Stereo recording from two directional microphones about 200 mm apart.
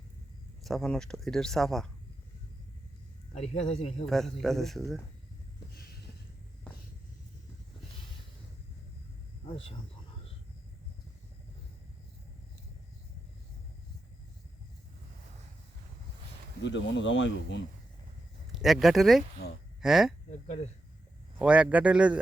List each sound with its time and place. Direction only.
0.6 s speech: centre (ahead or behind)
3.3 s speech: 30° left (ahead or behind)
4.0 s speech: centre (ahead or behind)
5.7 s a sound: 50° left (ahead or behind)
16.6 s speech: 65° left (ahead or behind)
18.5 s speech: centre (ahead or behind)
21.3 s speech: 5° right (ahead or behind)